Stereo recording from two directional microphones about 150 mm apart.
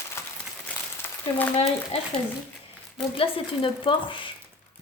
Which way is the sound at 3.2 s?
35° left (ahead or behind).